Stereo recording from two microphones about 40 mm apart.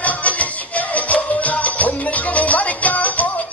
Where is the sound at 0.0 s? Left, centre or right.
Left.